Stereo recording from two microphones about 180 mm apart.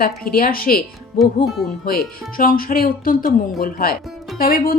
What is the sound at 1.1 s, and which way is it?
Speech, centre (ahead or behind).